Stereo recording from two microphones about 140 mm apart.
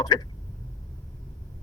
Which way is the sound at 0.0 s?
30° left (ahead or behind).